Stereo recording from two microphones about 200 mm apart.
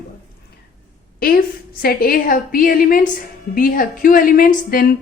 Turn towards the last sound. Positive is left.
turn(degrees=45)  # may be behind; listen again after turning